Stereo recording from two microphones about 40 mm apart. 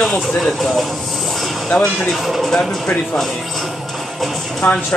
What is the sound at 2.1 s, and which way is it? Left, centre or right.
Speech, centre.